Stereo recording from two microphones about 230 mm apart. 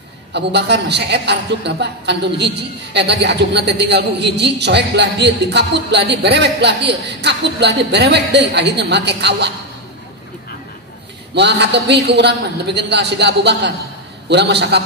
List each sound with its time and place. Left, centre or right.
0.3 s a man's voice: right
11.3 s a man's voice: right